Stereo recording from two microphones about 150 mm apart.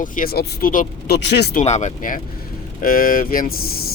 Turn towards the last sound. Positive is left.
turn(degrees=70)  # may be behind; listen again after turning